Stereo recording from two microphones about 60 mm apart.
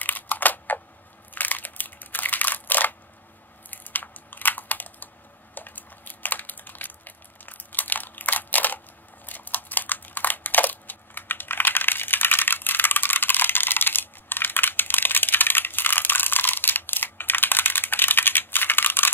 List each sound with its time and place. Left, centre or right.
0.0 s typing: left
1.3 s crushing: left
3.7 s computer keyboard: left